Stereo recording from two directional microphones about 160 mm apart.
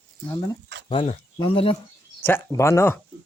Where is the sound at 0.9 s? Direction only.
35° left (ahead or behind).